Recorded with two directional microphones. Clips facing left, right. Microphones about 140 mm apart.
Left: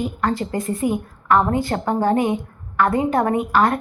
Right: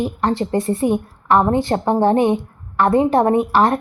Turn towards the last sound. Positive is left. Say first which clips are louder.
# right 3 dB
turn(degrees=-25)  # may be behind; listen again after turning